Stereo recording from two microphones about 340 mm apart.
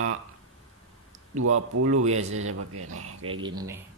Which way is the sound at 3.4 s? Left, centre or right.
Centre.